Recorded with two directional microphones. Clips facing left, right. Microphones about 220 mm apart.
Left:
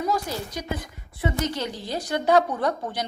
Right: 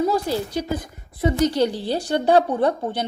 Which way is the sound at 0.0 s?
30° right (ahead or behind).